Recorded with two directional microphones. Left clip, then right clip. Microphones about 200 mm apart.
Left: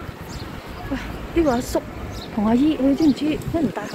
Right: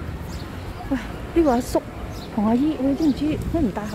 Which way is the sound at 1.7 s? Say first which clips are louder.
Right 1 dB; 15° right (ahead or behind).